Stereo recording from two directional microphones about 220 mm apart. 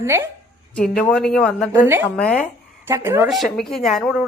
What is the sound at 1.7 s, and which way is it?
Speech, 10° right (ahead or behind).